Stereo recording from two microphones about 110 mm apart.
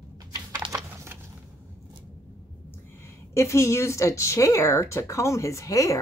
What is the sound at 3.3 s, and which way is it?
Speech, 25° left (ahead or behind).